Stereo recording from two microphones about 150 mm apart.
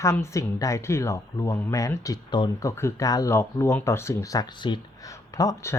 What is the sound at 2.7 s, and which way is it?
Speech, 20° left (ahead or behind).